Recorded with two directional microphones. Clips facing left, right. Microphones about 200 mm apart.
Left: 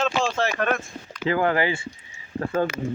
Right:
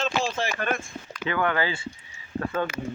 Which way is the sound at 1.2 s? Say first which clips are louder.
Left 4 dB; 30° left (ahead or behind).